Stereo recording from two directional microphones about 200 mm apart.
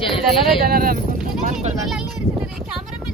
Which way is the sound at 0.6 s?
45° right (ahead or behind).